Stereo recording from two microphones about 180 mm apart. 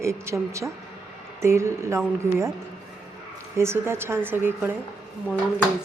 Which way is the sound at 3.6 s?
15° right (ahead or behind).